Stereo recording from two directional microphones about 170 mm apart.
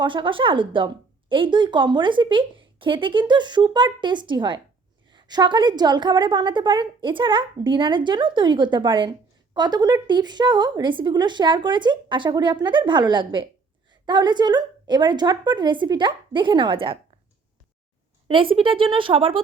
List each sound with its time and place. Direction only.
0.0 s a woman's voice: 30° right (ahead or behind)
18.3 s speech: 30° right (ahead or behind)